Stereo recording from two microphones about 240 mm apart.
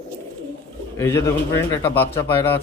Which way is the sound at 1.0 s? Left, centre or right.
Centre.